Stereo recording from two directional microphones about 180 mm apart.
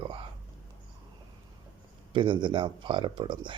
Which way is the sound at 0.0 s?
30° right (ahead or behind).